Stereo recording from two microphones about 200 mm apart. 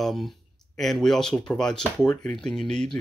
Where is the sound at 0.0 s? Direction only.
Centre (ahead or behind).